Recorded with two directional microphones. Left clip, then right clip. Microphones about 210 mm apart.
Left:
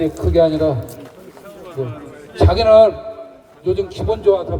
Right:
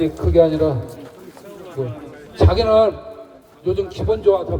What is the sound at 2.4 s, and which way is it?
A man's voice, 20° left (ahead or behind).